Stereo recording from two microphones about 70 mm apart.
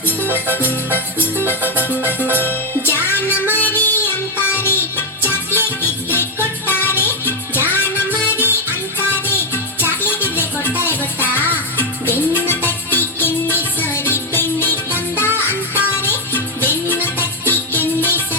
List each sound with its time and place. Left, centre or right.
0.3 s music: left
7.8 s music: right
9.2 s music: left